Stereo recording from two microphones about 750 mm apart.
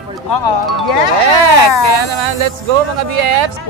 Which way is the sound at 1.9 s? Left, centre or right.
Right.